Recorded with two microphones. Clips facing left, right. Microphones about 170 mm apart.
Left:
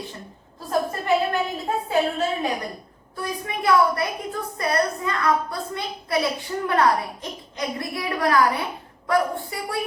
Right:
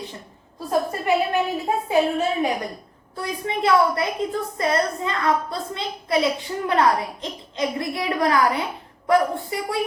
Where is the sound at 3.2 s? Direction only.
20° right (ahead or behind).